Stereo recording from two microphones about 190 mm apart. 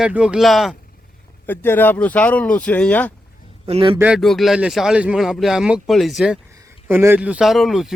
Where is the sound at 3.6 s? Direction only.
30° right (ahead or behind).